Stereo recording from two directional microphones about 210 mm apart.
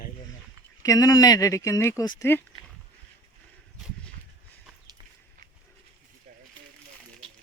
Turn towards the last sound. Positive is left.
turn(degrees=-35)  # may be behind; listen again after turning